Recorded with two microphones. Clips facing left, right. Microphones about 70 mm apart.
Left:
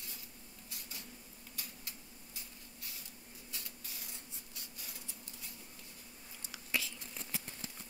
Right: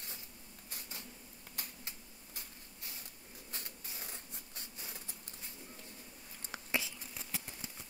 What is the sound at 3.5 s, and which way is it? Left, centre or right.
Mechanisms, right.